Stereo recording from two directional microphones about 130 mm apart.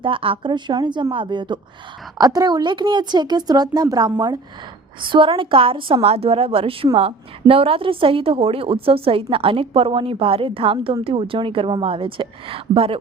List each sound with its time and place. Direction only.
0.0 s speech: 45° right (ahead or behind)
5.0 s a woman's voice: 40° right (ahead or behind)